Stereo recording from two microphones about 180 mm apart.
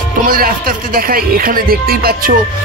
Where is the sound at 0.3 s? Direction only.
55° right (ahead or behind).